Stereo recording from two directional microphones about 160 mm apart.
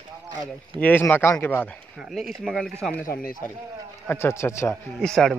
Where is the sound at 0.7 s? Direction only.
10° left (ahead or behind).